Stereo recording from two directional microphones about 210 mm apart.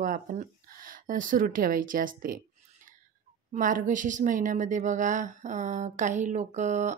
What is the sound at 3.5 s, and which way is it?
Speech, 40° right (ahead or behind).